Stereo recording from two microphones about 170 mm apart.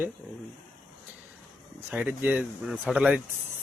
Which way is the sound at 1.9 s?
10° right (ahead or behind).